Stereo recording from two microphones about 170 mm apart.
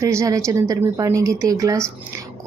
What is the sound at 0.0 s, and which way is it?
A woman's voice, 20° right (ahead or behind).